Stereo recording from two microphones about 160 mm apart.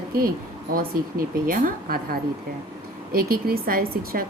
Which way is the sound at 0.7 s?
65° right (ahead or behind).